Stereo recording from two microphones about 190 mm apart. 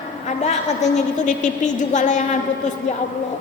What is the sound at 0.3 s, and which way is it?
A woman's voice, 35° left (ahead or behind).